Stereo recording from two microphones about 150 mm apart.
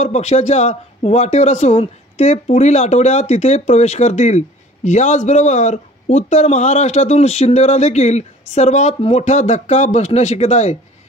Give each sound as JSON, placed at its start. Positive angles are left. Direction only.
{"t": 0.0, "sound": "speech", "side_deg": 50}